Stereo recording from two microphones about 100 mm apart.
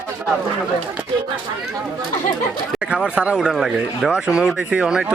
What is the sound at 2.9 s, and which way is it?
Speech, 10° right (ahead or behind).